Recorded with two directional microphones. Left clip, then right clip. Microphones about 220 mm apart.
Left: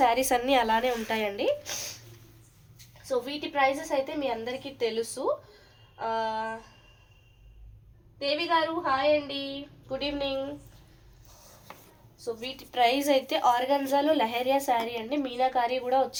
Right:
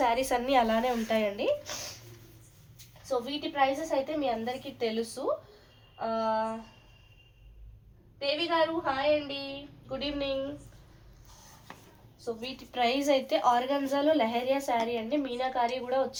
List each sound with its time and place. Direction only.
0.0 s a woman's voice: 50° left (ahead or behind)
3.1 s a woman's voice: 50° left (ahead or behind)
8.2 s a woman's voice: 40° left (ahead or behind)
12.2 s a woman's voice: 50° left (ahead or behind)